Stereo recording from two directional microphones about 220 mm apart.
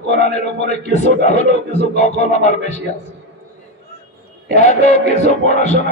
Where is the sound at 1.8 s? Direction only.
30° left (ahead or behind).